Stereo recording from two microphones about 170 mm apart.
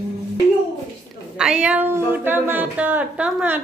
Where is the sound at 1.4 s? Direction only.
5° right (ahead or behind).